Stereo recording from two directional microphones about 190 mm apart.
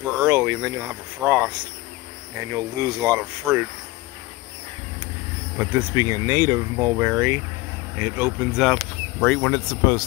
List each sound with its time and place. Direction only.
0.2 s speech: 10° right (ahead or behind)
2.5 s speech: 15° right (ahead or behind)
5.6 s speech: 10° right (ahead or behind)
8.0 s speech: 5° right (ahead or behind); by 10.0 s 15° left (ahead or behind)